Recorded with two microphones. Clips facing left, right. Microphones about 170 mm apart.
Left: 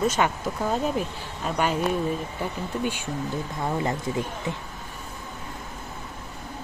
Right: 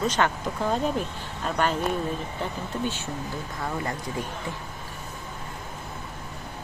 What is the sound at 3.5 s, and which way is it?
Speech, 20° left (ahead or behind).